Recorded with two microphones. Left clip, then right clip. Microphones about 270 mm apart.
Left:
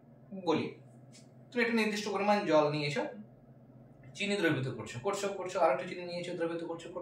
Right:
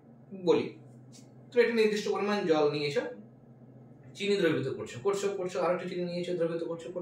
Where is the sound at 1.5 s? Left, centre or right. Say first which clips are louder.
Right 6 dB; centre.